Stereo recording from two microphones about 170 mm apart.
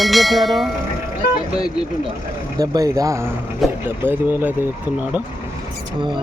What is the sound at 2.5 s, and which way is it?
Speech, 20° right (ahead or behind).